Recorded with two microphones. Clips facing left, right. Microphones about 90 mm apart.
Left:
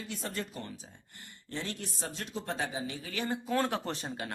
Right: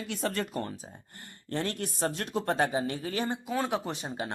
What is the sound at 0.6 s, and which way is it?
Speech, 40° right (ahead or behind).